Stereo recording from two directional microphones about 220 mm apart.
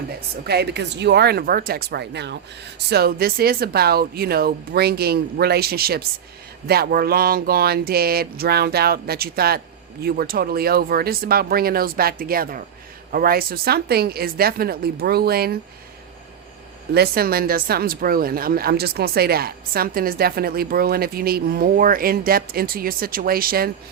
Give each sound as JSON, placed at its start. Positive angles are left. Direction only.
{"t": 0.4, "sound": "a woman's voice", "side_deg": -50}
{"t": 16.9, "sound": "a woman's voice", "side_deg": -45}